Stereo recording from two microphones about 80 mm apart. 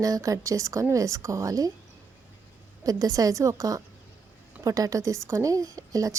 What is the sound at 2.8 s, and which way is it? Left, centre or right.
Speech, right.